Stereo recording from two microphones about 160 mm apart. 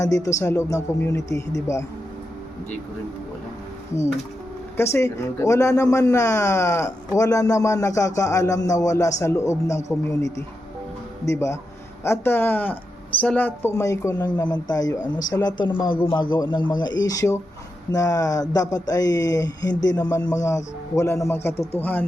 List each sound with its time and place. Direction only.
0.0 s speech: 20° left (ahead or behind)
4.8 s speech: 15° left (ahead or behind)